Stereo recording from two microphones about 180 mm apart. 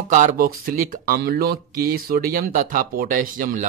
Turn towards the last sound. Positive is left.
turn(degrees=-50)  # may be behind; listen again after turning